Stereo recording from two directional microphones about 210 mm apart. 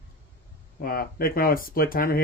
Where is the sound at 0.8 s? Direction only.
45° left (ahead or behind).